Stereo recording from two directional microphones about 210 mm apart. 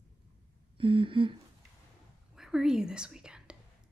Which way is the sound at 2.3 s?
Centre (ahead or behind).